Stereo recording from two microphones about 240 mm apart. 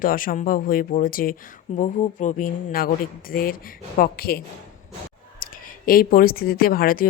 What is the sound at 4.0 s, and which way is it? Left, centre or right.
Speech, left.